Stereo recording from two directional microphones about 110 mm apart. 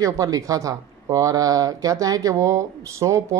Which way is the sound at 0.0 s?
30° right (ahead or behind).